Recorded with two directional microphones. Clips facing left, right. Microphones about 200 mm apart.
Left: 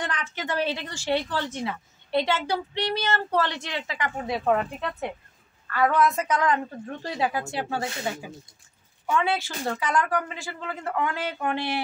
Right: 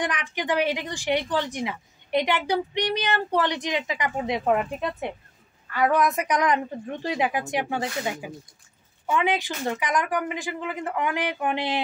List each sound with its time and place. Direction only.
0.0 s a woman's voice: 15° right (ahead or behind)
9.0 s a woman's voice: 15° right (ahead or behind)